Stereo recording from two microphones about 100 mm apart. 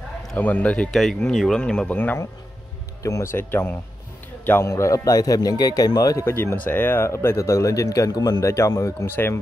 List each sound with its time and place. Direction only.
0.4 s speech: 15° left (ahead or behind)
0.9 s speech: 5° left (ahead or behind)
3.0 s speech: 30° left (ahead or behind)
6.2 s speech: 25° left (ahead or behind)
9.0 s speech: 20° left (ahead or behind)